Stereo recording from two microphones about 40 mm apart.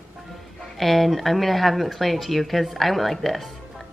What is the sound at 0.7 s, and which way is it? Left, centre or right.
Speech, centre.